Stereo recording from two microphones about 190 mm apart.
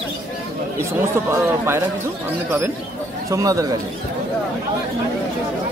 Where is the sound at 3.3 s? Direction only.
15° right (ahead or behind).